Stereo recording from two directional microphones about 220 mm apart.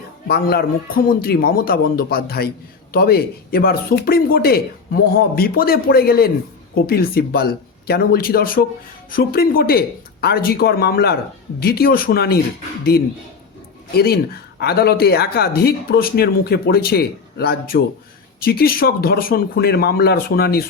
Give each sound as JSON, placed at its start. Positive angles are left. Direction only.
{"t": 0.3, "sound": "speech", "side_deg": 45}
{"t": 13.9, "sound": "speech", "side_deg": 45}